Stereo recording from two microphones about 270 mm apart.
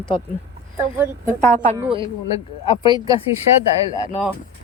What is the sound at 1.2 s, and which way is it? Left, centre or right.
Speech, right.